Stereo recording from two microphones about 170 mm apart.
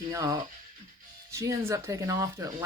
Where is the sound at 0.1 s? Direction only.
20° right (ahead or behind).